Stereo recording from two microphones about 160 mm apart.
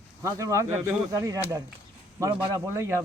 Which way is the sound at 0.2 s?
20° right (ahead or behind).